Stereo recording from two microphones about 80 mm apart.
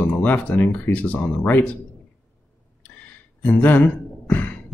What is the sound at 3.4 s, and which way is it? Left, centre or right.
Speech, left.